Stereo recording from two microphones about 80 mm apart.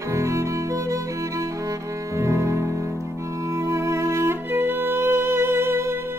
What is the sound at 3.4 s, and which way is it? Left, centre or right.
Music, right.